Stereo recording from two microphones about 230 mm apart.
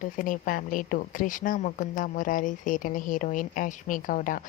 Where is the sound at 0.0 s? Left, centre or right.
Left.